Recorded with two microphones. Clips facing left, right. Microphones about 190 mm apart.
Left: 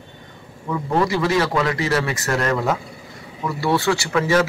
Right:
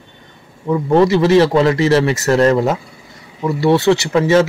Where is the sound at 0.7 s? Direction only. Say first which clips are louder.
Right 8 dB; 25° right (ahead or behind).